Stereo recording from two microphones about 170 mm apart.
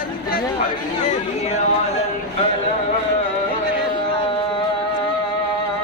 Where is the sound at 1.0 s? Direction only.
45° left (ahead or behind).